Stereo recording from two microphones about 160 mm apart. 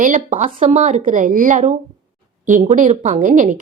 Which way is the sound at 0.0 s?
55° right (ahead or behind).